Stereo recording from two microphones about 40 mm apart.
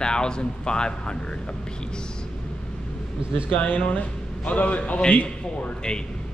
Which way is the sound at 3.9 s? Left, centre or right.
Left.